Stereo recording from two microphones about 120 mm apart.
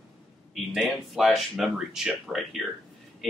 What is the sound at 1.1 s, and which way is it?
Speech, centre (ahead or behind).